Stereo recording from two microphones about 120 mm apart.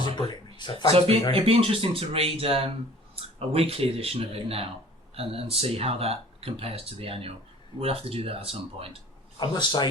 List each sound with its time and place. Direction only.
0.2 s speech: 40° left (ahead or behind)
0.9 s speech: 55° right (ahead or behind)
9.4 s a man's voice: 40° left (ahead or behind)